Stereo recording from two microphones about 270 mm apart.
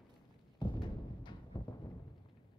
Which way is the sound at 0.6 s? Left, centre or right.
Centre.